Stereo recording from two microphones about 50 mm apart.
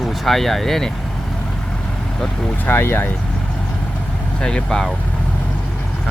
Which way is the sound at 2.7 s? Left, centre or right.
Left.